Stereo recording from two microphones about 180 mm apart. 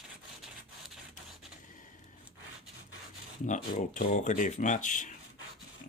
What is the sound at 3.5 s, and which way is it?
Speech, 45° left (ahead or behind).